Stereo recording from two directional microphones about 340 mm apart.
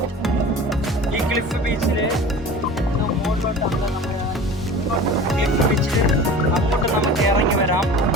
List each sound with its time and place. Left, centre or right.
5.7 s music: centre
7.3 s music: right